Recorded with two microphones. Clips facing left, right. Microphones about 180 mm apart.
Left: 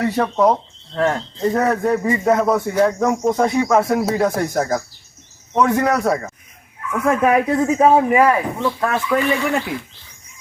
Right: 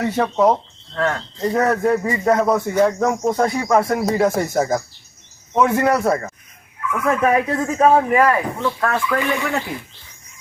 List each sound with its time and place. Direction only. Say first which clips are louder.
0.0 s speech: even; centre (ahead or behind)
0.9 s speech: left 3 dB; 20° left (ahead or behind)
1.4 s speech: even; centre (ahead or behind)
7.0 s speech: left 2 dB; 10° left (ahead or behind)